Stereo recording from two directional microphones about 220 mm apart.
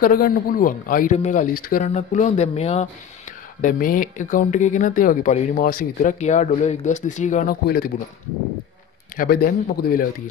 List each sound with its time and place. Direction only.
0.0 s speech: 40° left (ahead or behind)
7.6 s speech: 45° left (ahead or behind)
9.1 s speech: 40° left (ahead or behind)